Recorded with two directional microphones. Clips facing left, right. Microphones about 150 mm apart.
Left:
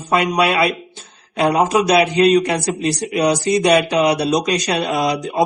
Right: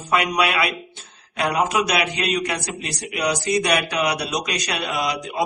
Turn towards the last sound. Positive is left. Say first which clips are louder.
# left 6 dB
turn(degrees=35)  # may be behind; listen again after turning